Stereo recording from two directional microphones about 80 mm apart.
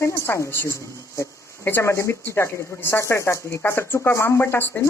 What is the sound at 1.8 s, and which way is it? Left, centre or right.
Speech, left.